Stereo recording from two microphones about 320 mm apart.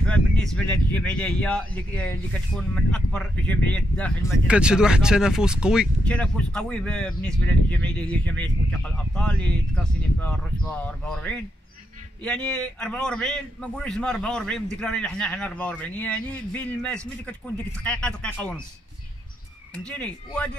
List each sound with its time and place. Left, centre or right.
0.0 s speech: centre
19.9 s speech: centre